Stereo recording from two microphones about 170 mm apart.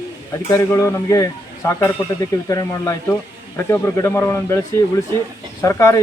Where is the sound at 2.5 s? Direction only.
20° left (ahead or behind).